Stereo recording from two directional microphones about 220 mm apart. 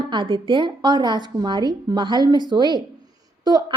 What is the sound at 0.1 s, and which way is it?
A woman's voice, 20° right (ahead or behind).